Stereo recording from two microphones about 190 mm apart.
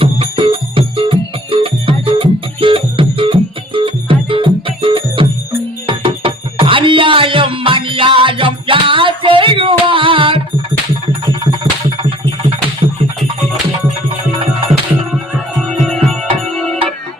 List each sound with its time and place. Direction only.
0.0 s music: 30° right (ahead or behind)
12.8 s music: 25° right (ahead or behind)
15.8 s music: 5° left (ahead or behind)